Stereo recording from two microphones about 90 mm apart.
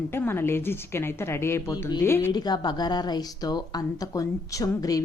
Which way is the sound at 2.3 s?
50° left (ahead or behind).